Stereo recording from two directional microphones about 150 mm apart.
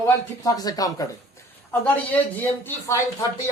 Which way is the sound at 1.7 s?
10° left (ahead or behind).